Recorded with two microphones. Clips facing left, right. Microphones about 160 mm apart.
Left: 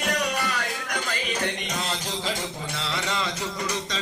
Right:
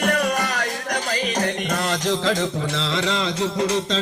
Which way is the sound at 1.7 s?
75° right (ahead or behind).